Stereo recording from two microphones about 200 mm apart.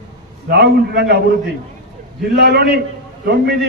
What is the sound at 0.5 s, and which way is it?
Speech, 55° right (ahead or behind).